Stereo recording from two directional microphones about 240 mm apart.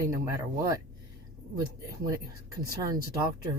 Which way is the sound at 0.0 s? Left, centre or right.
Centre.